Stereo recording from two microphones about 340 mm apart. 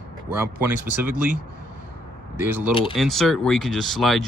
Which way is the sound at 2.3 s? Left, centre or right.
Centre.